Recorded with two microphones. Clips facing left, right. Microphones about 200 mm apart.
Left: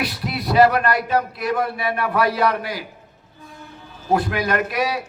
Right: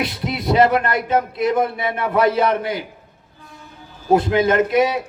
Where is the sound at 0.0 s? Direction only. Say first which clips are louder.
Right 2 dB; 20° right (ahead or behind).